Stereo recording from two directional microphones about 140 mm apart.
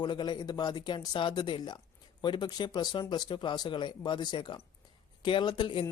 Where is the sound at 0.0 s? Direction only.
30° left (ahead or behind).